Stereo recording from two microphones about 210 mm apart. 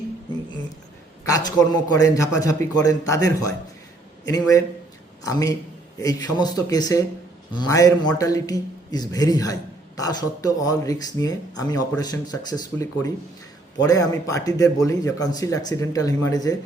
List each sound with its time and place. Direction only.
1.3 s a man's voice: 20° left (ahead or behind)